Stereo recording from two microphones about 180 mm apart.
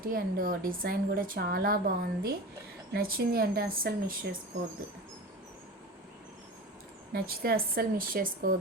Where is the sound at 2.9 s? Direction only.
55° right (ahead or behind).